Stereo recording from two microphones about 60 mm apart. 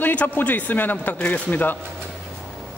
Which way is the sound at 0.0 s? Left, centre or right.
Left.